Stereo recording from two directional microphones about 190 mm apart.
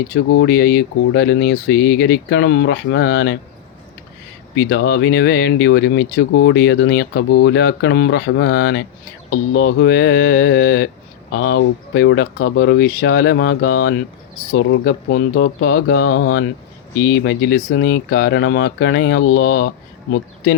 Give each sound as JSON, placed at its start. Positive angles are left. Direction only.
{"t": 0.3, "sound": "speech", "side_deg": 60}
{"t": 4.5, "sound": "speech", "side_deg": 60}